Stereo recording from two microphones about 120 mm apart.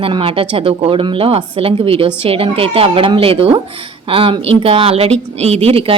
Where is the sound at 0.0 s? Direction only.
50° right (ahead or behind).